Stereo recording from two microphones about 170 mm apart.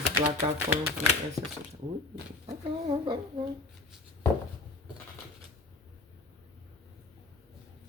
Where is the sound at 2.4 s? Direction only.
30° right (ahead or behind).